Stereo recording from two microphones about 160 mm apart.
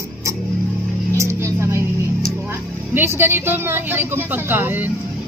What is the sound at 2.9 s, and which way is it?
Speech, 15° right (ahead or behind).